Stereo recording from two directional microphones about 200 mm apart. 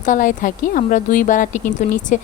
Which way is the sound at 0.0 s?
40° left (ahead or behind).